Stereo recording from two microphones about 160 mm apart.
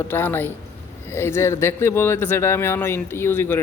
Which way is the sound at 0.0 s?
15° left (ahead or behind).